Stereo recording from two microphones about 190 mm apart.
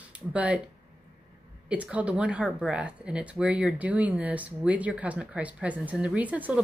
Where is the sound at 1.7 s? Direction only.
5° right (ahead or behind).